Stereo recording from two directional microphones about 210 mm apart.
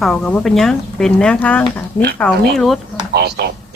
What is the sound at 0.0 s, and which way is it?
Speech, centre (ahead or behind).